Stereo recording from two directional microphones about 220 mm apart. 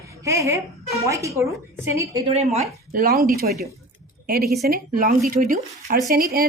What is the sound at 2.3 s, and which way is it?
A woman's voice, 30° right (ahead or behind).